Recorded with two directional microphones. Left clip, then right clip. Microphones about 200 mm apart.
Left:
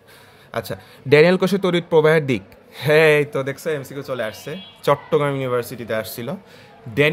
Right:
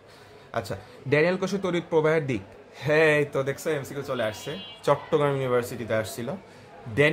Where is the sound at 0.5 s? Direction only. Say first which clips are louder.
Left 4 dB; 40° left (ahead or behind).